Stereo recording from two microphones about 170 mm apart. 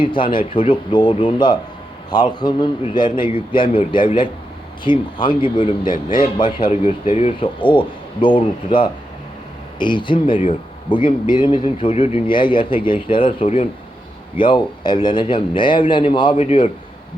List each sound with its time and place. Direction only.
0.0 s speech: 30° left (ahead or behind)